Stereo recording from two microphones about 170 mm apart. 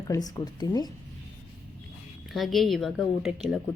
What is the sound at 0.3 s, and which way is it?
Speech, 20° left (ahead or behind).